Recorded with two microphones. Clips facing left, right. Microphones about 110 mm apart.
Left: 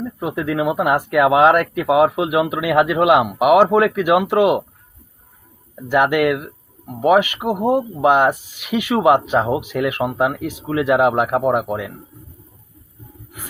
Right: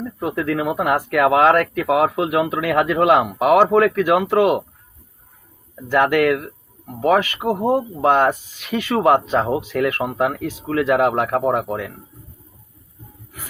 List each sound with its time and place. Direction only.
0.2 s speech: 15° left (ahead or behind)
5.9 s speech: 15° left (ahead or behind)